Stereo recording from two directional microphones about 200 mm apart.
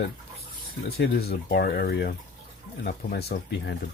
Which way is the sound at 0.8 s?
50° left (ahead or behind).